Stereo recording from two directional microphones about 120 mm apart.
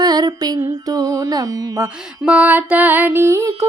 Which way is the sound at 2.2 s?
10° right (ahead or behind).